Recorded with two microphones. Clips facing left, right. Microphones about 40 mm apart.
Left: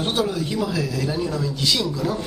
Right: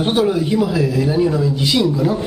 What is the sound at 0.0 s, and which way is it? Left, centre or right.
Speech, right.